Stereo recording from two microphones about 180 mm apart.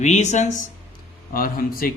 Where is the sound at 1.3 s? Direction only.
55° left (ahead or behind).